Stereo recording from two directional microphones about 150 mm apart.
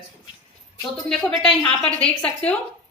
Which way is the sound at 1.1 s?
5° left (ahead or behind).